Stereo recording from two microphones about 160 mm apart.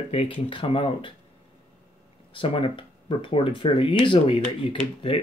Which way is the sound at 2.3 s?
35° left (ahead or behind).